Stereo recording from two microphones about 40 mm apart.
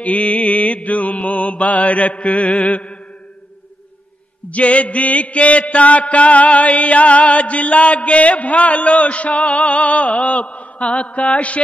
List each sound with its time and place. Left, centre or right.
0.0 s mantra: left
4.5 s mantra: left